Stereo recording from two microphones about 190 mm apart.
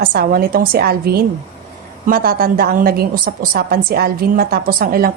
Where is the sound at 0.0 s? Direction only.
55° right (ahead or behind).